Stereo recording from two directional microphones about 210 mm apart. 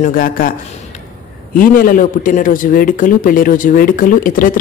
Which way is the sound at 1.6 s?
40° left (ahead or behind).